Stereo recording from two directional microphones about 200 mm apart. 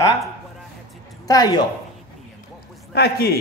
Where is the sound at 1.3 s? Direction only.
20° left (ahead or behind).